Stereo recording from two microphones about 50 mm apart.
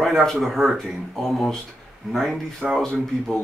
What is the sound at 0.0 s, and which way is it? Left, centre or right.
A man's voice, centre.